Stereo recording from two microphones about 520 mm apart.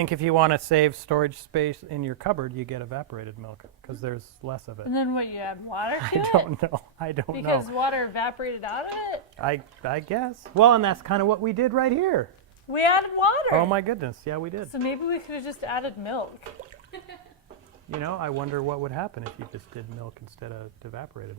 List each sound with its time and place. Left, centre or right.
0.0 s speech: right
4.9 s speech: left
6.6 s speech: right
7.4 s speech: left
9.4 s speech: right
10.5 s speech: right
12.7 s speech: left
13.7 s speech: right
14.3 s speech: right
14.7 s speech: left
18.0 s speech: right
20.4 s speech: right